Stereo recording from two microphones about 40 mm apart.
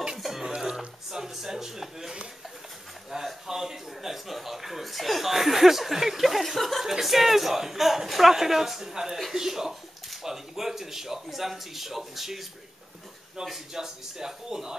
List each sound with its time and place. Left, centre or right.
0.2 s music: centre
0.7 s a sound: centre
3.4 s chuckle: centre
6.9 s a man's voice: centre
9.3 s a sound: centre
11.2 s speech: centre
13.4 s a man's voice: centre